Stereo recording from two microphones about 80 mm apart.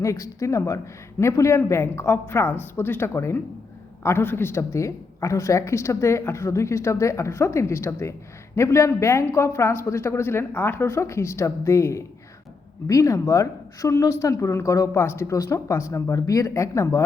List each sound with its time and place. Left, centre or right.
0.0 s a woman's voice: left